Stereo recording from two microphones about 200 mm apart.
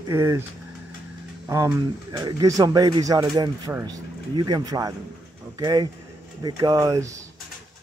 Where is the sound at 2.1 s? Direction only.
15° right (ahead or behind).